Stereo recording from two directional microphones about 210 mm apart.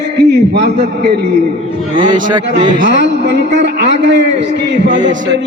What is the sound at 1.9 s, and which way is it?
Speech, 25° right (ahead or behind).